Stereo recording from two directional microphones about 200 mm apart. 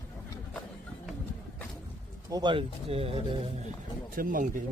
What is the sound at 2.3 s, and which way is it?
Speech, 25° right (ahead or behind).